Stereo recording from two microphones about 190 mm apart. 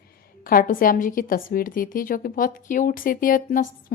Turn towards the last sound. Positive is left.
turn(degrees=45)  # may be behind; listen again after turning